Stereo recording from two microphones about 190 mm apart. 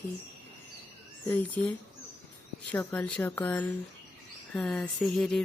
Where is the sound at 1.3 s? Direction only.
10° left (ahead or behind).